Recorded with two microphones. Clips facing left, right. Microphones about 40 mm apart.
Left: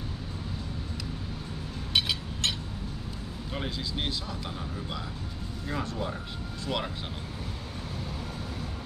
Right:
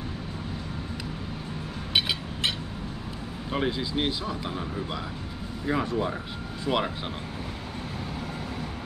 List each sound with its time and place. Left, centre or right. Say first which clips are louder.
2.0 s a sound: right 2 dB; centre
3.5 s speech: right 7 dB; centre
5.7 s speech: right 6 dB; centre